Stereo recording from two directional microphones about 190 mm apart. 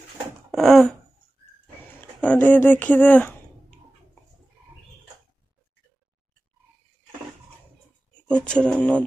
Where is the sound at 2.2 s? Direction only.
10° left (ahead or behind).